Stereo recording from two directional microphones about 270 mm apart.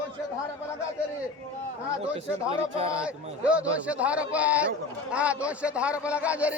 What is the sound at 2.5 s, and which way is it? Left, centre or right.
Speech, right.